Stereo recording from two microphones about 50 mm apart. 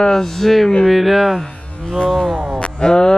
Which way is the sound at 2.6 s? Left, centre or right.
Centre.